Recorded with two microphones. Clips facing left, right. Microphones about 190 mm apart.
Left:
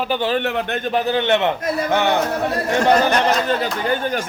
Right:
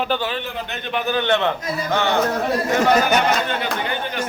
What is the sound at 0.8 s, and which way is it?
A man's voice, 40° left (ahead or behind).